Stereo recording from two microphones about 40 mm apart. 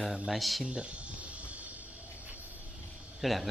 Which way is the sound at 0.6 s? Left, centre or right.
Right.